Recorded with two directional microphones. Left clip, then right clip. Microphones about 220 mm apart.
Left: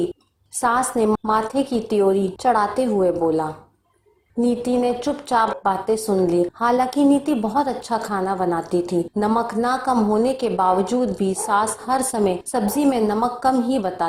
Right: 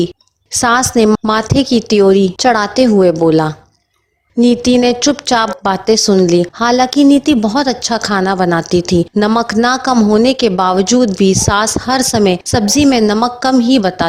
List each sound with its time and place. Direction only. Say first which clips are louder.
0.6 s a woman's voice: right 8 dB; 45° right (ahead or behind)